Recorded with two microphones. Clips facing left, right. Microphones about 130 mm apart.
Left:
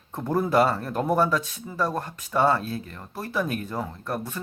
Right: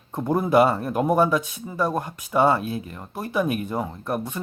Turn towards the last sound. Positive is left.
turn(degrees=-15)  # may be behind; listen again after turning